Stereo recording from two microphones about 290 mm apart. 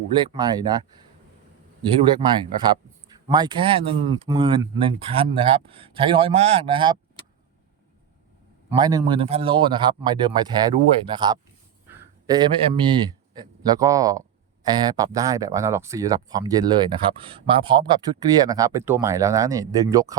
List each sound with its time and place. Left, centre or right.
0.2 s a man's voice: centre
2.0 s a man's voice: centre
8.8 s a man's voice: centre